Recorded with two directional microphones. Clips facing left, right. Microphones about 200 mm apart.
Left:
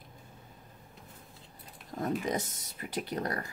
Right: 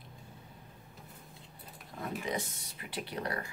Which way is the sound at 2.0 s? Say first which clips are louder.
Left 5 dB; 45° left (ahead or behind).